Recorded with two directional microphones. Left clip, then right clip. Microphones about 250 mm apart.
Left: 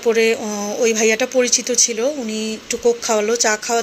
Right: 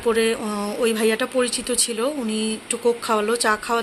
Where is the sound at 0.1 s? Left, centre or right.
Centre.